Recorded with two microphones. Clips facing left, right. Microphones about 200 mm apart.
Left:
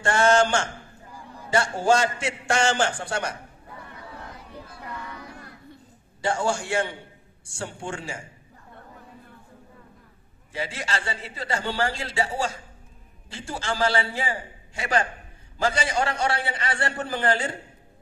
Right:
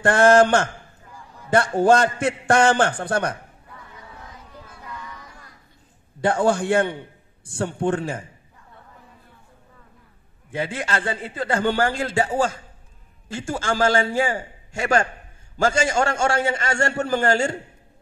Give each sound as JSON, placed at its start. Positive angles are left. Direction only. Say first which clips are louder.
{"t": 0.0, "sound": "a man's voice", "louder": "right 5 dB", "side_deg": -55}
{"t": 3.9, "sound": "a sound", "louder": "left 2 dB", "side_deg": 65}
{"t": 6.2, "sound": "a man's voice", "louder": "right 6 dB", "side_deg": -55}
{"t": 10.5, "sound": "a man's voice", "louder": "right 5 dB", "side_deg": -55}